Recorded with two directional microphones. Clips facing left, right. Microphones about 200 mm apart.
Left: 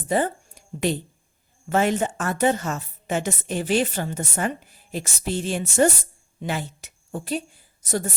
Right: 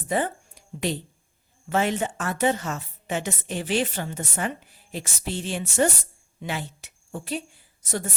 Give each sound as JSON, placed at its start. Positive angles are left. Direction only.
{"t": 0.1, "sound": "a woman's voice", "side_deg": 45}